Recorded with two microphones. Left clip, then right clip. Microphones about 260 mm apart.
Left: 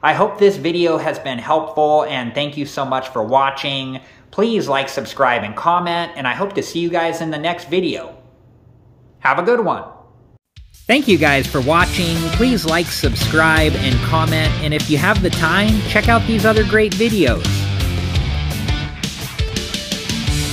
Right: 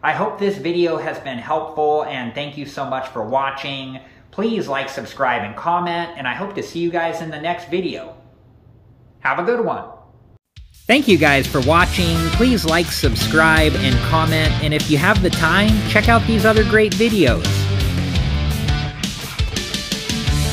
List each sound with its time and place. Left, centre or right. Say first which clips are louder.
0.0 s speech: left 6 dB; left
9.2 s speech: left 3 dB; left
10.9 s speech: even; centre
18.7 s music: even; centre